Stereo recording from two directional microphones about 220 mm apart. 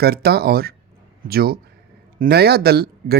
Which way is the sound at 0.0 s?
45° right (ahead or behind).